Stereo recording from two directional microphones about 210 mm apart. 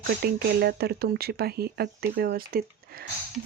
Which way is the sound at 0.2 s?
50° right (ahead or behind).